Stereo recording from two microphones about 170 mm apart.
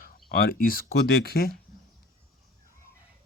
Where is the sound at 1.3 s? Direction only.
65° left (ahead or behind).